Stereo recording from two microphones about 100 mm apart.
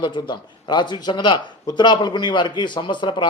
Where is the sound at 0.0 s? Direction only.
50° left (ahead or behind).